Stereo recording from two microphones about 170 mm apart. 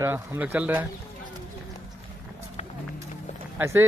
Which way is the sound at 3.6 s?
10° right (ahead or behind).